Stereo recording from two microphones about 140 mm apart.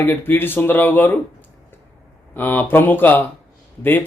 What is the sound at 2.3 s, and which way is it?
Speech, 10° left (ahead or behind).